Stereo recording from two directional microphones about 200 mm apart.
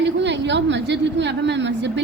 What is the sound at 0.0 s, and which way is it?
A woman's voice, 60° right (ahead or behind).